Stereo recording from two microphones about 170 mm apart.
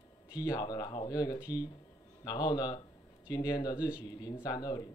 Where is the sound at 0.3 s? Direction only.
20° left (ahead or behind).